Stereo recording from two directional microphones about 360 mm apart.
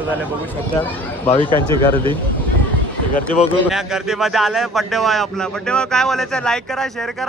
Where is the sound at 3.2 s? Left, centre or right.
Centre.